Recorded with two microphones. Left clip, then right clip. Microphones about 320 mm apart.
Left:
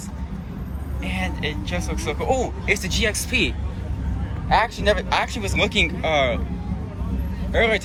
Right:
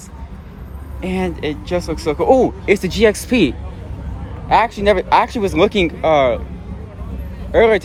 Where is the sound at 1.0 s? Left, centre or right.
Centre.